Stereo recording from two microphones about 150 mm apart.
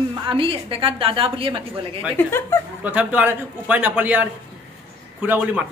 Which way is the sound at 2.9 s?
10° right (ahead or behind).